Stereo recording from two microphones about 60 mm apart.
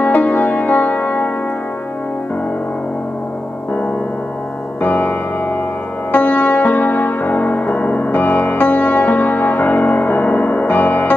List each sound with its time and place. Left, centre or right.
0.0 s music: left
4.8 s music: left
6.1 s music: left